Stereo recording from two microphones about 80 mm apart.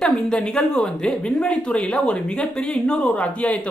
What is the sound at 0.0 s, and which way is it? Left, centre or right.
Speech, centre.